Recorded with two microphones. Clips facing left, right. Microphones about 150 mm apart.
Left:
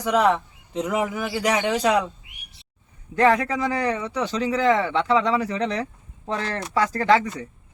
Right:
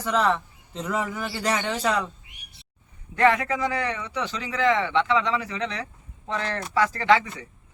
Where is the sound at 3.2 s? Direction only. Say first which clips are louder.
Left 2 dB; 35° left (ahead or behind).